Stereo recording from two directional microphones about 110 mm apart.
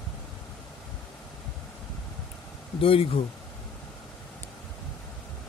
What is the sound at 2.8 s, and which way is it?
Speech, 65° left (ahead or behind).